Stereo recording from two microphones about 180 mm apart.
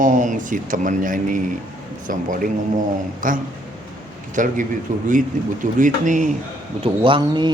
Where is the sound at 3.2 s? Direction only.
50° right (ahead or behind).